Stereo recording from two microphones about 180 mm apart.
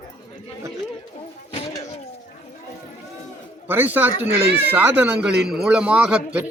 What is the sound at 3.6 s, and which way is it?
A man's voice, 10° right (ahead or behind).